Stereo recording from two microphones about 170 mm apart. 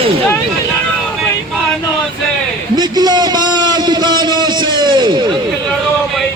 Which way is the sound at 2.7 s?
25° right (ahead or behind).